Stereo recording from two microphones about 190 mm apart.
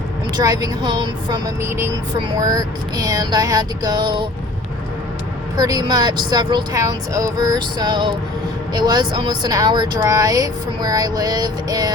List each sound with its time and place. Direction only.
0.3 s speech: 20° right (ahead or behind)
5.5 s speech: 20° right (ahead or behind)